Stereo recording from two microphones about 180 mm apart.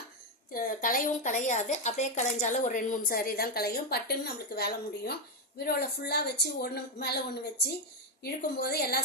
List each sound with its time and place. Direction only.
0.5 s a woman's voice: 50° left (ahead or behind)